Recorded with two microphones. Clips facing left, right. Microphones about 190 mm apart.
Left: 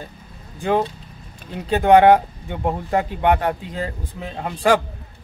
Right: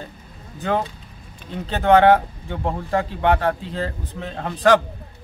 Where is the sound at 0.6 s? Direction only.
10° left (ahead or behind).